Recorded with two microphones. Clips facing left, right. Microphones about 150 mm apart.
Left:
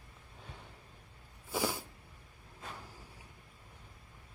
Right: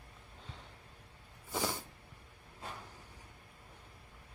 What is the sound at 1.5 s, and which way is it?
Cat, 5° left (ahead or behind).